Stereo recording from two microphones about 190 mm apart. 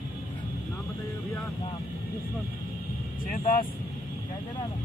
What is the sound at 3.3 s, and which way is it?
Speech, 35° left (ahead or behind).